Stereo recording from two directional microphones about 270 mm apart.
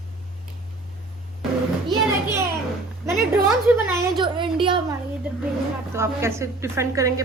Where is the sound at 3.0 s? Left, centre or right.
Centre.